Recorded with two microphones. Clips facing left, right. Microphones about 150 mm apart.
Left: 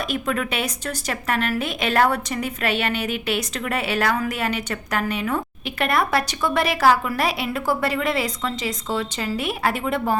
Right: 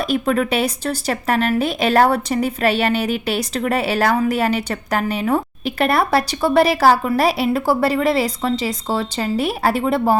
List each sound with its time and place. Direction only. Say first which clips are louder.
0.0 s a woman's voice: right 6 dB; 35° right (ahead or behind)